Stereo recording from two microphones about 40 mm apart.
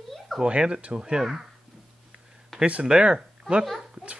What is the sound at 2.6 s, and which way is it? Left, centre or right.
Speech, right.